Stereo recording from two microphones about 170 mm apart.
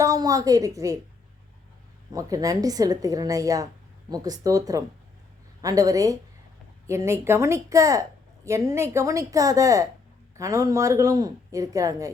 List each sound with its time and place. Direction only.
0.0 s speech: 20° right (ahead or behind)
2.1 s a woman's voice: 20° right (ahead or behind)